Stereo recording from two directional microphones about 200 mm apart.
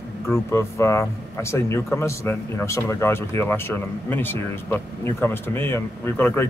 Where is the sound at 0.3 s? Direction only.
10° left (ahead or behind).